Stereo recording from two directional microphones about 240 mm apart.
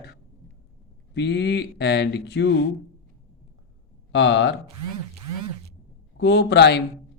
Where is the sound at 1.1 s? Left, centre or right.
Left.